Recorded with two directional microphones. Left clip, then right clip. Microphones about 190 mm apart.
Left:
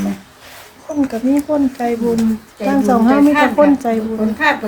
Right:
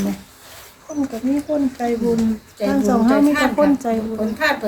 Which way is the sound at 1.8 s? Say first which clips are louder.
Left 3 dB; 10° left (ahead or behind).